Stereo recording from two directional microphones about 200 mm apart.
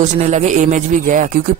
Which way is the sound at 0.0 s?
35° right (ahead or behind).